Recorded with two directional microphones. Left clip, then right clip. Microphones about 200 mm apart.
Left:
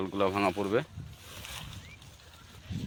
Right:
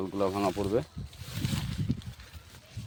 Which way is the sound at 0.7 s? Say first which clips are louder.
Even; 5° right (ahead or behind).